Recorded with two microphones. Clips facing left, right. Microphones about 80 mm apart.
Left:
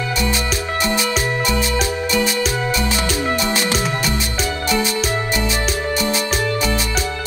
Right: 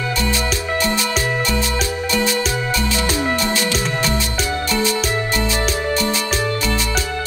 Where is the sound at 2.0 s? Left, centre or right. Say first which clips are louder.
Right 2 dB; centre.